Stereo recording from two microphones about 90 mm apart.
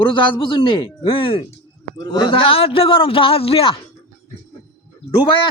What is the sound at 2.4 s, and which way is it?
Speech, 90° left.